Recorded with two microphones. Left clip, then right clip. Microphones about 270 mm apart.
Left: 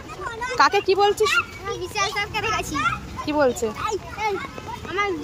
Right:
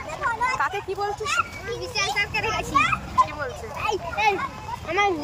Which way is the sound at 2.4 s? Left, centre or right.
Left.